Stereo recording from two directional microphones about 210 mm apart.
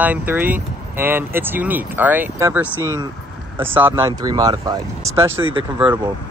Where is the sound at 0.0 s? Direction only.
10° right (ahead or behind); by 5.9 s 25° right (ahead or behind).